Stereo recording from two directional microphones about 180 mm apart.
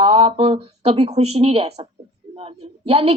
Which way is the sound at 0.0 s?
30° right (ahead or behind).